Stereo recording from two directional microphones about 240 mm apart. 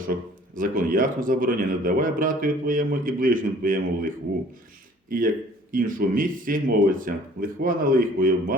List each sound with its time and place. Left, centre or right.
0.1 s speech: right